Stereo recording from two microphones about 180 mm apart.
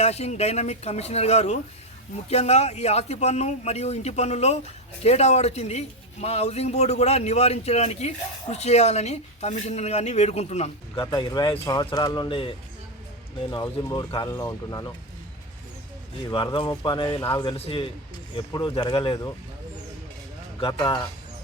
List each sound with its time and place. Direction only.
0.0 s a man's voice: 35° left (ahead or behind)
11.0 s speech: 20° left (ahead or behind)
13.5 s speech: 20° left (ahead or behind)
16.3 s speech: 30° left (ahead or behind)
20.6 s speech: 30° left (ahead or behind)